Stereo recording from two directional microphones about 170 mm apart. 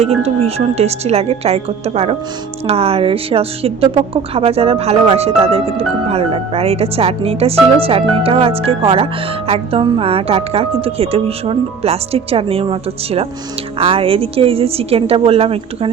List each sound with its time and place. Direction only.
0.0 s a woman's voice: 35° right (ahead or behind)